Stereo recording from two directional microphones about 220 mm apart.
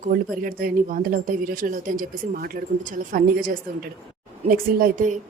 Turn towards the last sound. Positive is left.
turn(degrees=-40)  # may be behind; listen again after turning